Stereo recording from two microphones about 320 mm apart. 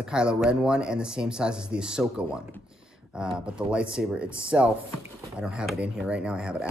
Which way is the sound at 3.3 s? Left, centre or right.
Centre.